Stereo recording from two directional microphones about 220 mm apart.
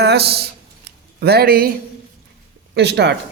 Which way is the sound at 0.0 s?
50° right (ahead or behind).